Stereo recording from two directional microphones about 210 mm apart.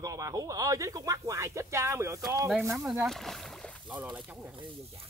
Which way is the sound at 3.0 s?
Centre (ahead or behind).